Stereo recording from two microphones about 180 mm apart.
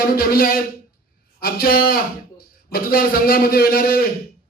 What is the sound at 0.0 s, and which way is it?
Speech, 55° left (ahead or behind).